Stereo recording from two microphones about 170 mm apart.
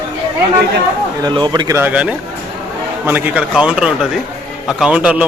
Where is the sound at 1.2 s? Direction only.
25° right (ahead or behind).